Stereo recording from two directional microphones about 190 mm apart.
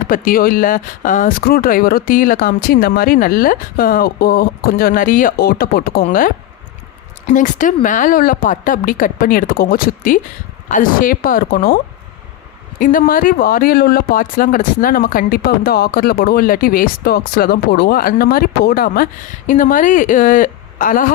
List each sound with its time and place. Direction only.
0.1 s speech: 50° left (ahead or behind)
7.3 s speech: 45° left (ahead or behind)
12.8 s speech: 45° left (ahead or behind)